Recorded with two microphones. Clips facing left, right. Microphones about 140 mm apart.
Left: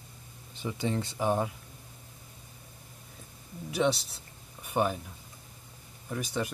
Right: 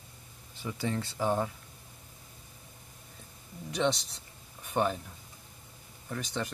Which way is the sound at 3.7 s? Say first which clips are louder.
Left 2 dB; 5° left (ahead or behind).